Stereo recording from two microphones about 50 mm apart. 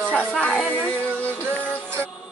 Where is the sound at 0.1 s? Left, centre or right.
Left.